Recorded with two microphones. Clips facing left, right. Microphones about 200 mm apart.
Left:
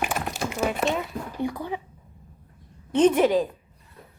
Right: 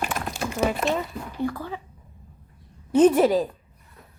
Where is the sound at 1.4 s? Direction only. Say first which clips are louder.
Right 1 dB; 15° left (ahead or behind).